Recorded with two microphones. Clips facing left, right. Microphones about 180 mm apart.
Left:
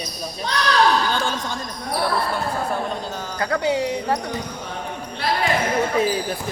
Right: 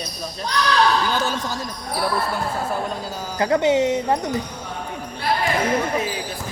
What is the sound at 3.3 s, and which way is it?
Speech, 20° right (ahead or behind).